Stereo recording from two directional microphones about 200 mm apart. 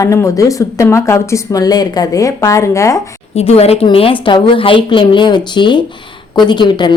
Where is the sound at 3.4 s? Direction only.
30° left (ahead or behind).